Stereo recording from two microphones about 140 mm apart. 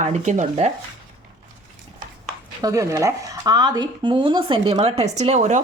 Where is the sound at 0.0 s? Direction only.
60° right (ahead or behind).